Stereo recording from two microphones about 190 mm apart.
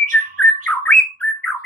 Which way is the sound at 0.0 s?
45° right (ahead or behind).